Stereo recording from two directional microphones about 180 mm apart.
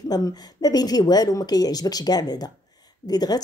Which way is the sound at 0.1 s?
20° left (ahead or behind).